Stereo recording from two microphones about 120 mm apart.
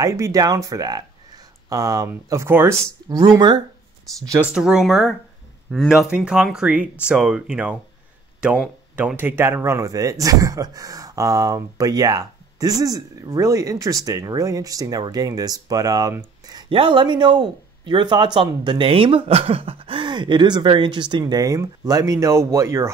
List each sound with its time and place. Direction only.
0.0 s speech: 25° right (ahead or behind)
4.4 s speech: 5° right (ahead or behind)
8.9 s speech: 15° right (ahead or behind)
16.5 s speech: 45° right (ahead or behind); by 22.8 s 25° right (ahead or behind)